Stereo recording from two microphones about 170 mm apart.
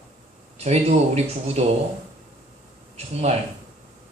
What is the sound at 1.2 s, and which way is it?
Speech, 40° right (ahead or behind).